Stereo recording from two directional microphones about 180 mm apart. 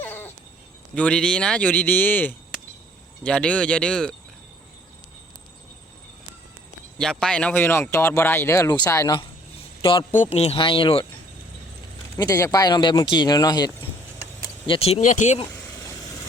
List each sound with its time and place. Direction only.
0.0 s a sound: 10° left (ahead or behind)
0.9 s speech: 5° left (ahead or behind)
7.0 s speech: 5° left (ahead or behind)
9.8 s a man's voice: 30° left (ahead or behind)
12.1 s speech: 20° left (ahead or behind)
14.7 s speech: 35° left (ahead or behind)
15.7 s vehicle: 15° left (ahead or behind)